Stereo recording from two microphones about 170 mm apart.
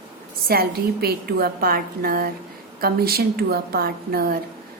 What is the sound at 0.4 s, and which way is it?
A woman's voice, 65° right (ahead or behind).